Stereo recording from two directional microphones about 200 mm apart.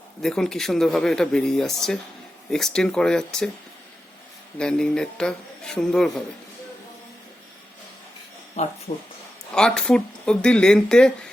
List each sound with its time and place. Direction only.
0.2 s speech: 5° left (ahead or behind)
4.5 s speech: 5° left (ahead or behind)
8.6 s speech: 35° left (ahead or behind)
9.6 s speech: 5° left (ahead or behind)